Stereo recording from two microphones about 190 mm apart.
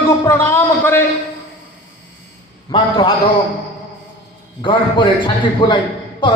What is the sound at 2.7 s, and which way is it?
Speech, 25° left (ahead or behind).